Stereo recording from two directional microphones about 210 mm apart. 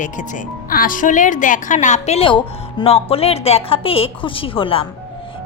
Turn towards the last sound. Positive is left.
turn(degrees=25)  # may be behind; listen again after turning